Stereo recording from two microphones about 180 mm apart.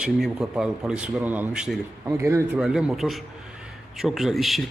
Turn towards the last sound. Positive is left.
turn(degrees=0)  # may be behind; listen again after turning